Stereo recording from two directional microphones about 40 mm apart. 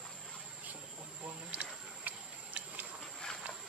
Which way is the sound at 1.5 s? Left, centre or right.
Right.